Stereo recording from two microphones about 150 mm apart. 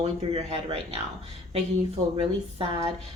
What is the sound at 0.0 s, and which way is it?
Speech, 40° right (ahead or behind).